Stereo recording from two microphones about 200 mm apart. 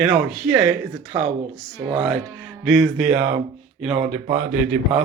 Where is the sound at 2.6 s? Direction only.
Centre (ahead or behind).